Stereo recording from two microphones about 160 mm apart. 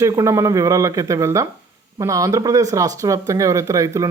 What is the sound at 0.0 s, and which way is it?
Speech, 20° right (ahead or behind).